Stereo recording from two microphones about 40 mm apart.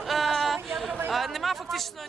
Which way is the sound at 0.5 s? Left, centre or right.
Centre.